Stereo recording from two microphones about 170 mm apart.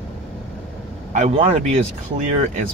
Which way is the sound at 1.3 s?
35° right (ahead or behind).